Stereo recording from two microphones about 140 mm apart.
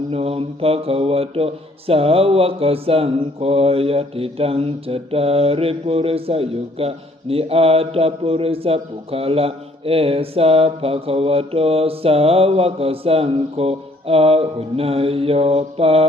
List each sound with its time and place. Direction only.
0.1 s speech: 45° right (ahead or behind)